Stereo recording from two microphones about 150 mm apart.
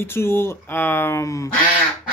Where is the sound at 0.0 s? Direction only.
15° left (ahead or behind).